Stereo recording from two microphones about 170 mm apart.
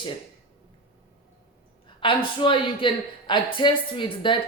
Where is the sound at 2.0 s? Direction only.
30° left (ahead or behind).